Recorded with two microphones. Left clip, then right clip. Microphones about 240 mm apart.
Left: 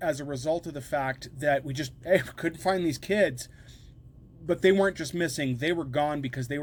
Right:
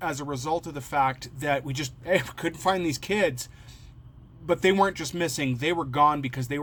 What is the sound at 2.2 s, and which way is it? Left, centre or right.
Speech, right.